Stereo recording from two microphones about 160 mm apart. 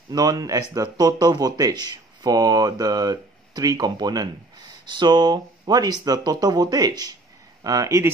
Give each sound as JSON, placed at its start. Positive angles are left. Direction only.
{"t": 0.1, "sound": "speech", "side_deg": -25}